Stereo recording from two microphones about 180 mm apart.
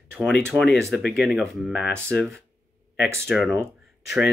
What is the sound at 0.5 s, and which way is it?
Speech, 15° right (ahead or behind).